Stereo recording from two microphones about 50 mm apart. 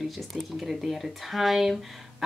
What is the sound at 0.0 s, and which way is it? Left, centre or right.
Speech, centre.